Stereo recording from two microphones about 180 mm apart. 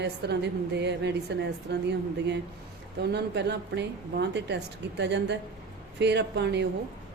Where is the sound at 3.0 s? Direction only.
65° right (ahead or behind).